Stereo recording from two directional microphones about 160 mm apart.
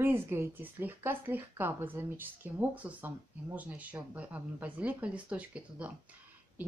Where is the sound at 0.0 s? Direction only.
15° right (ahead or behind).